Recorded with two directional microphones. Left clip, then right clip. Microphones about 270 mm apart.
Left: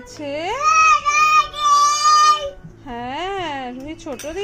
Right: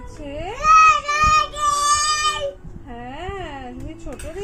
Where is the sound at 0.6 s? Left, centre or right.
Centre.